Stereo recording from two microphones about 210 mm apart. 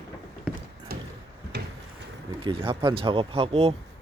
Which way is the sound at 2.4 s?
25° right (ahead or behind).